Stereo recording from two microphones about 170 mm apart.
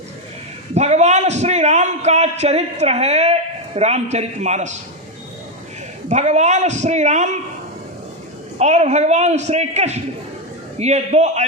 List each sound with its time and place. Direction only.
0.7 s a man's voice: 40° right (ahead or behind)
6.1 s a man's voice: 45° right (ahead or behind)
8.5 s a man's voice: 40° right (ahead or behind)